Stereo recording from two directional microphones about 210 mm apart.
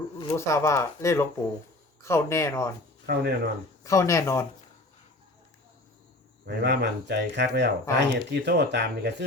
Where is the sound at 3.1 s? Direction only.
50° right (ahead or behind).